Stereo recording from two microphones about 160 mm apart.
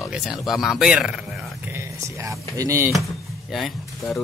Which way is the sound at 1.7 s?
20° right (ahead or behind).